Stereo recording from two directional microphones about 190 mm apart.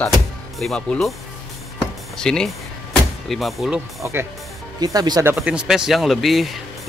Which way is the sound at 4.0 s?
10° right (ahead or behind).